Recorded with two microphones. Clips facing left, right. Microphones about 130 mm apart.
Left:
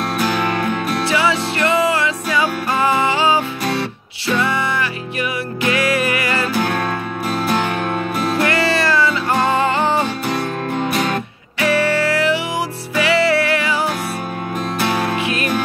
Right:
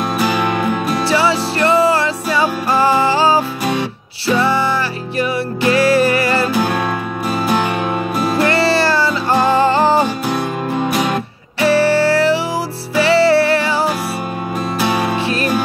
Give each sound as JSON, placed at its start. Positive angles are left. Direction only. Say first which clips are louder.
{"t": 0.2, "sound": "music", "louder": "right 2 dB", "side_deg": -5}
{"t": 1.0, "sound": "music", "louder": "right 3 dB", "side_deg": -35}
{"t": 6.5, "sound": "music", "louder": "right 2 dB", "side_deg": -5}
{"t": 8.5, "sound": "music", "louder": "right 3 dB", "side_deg": -35}
{"t": 10.2, "sound": "music", "louder": "right 2 dB", "side_deg": -5}
{"t": 11.6, "sound": "music", "louder": "right 4 dB", "side_deg": -35}
{"t": 14.8, "sound": "music", "louder": "right 2 dB", "side_deg": -5}